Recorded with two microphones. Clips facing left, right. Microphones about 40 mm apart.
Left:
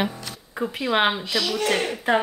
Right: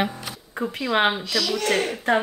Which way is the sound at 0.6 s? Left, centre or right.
Centre.